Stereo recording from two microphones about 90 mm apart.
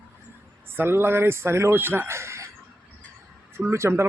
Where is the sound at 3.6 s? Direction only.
30° right (ahead or behind).